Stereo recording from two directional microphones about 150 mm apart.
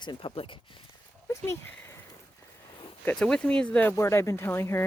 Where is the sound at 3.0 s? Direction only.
5° left (ahead or behind).